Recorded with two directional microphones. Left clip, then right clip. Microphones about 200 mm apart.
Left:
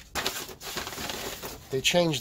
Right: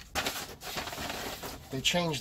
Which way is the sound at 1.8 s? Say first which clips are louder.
Left 5 dB; 55° left (ahead or behind).